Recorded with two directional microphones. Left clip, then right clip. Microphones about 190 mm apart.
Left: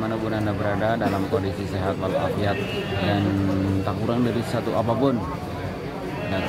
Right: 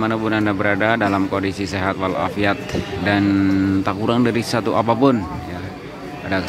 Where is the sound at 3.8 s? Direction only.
25° right (ahead or behind).